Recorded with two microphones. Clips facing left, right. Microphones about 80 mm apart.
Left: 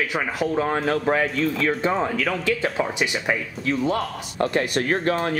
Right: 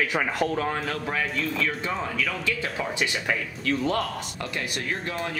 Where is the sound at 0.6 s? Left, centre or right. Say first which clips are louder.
Left 5 dB; left.